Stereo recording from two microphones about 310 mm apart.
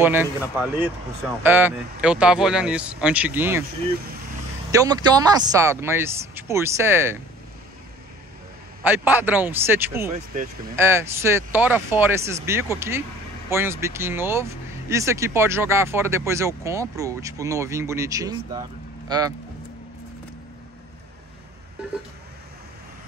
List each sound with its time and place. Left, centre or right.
0.0 s speech: centre
4.6 s speech: centre
8.8 s speech: centre
10.1 s speech: right
10.8 s speech: centre